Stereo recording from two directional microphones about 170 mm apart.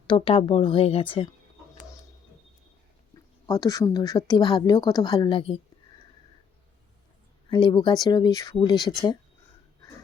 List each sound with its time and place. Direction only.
0.1 s speech: 30° left (ahead or behind)
3.4 s a woman's voice: 20° left (ahead or behind)
7.5 s a woman's voice: 30° left (ahead or behind)